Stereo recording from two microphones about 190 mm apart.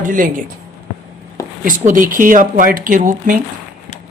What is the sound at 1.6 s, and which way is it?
Speech, 45° right (ahead or behind).